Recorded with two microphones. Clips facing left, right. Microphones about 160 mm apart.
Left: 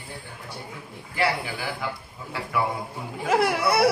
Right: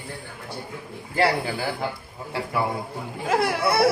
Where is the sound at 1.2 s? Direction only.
40° right (ahead or behind).